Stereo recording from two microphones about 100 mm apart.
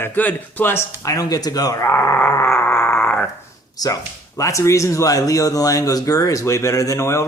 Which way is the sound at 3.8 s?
40° left (ahead or behind).